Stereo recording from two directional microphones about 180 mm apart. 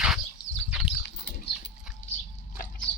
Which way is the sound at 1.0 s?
70° left (ahead or behind).